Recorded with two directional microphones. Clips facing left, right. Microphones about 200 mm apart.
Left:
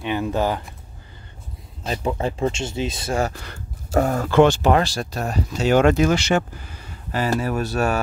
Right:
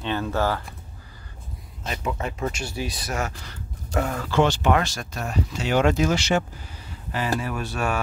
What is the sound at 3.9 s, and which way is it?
Speech, 40° left (ahead or behind).